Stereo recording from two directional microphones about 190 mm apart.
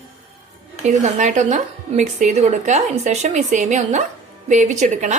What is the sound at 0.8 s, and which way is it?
Speech, 40° right (ahead or behind).